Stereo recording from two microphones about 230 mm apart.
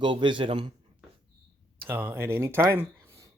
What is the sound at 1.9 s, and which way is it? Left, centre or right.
Speech, centre.